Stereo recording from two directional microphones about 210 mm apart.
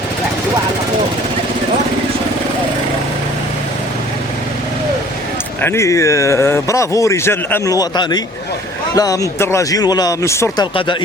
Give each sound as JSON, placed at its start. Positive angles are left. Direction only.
{"t": 5.6, "sound": "speech", "side_deg": 10}